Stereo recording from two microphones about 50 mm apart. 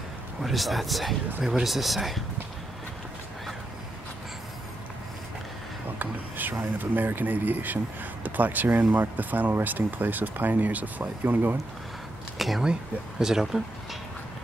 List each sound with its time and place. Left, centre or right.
0.4 s speech: centre
5.9 s speech: right
12.4 s speech: centre